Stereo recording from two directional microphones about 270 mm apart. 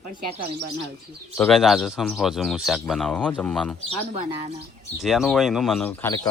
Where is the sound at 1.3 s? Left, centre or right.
Centre.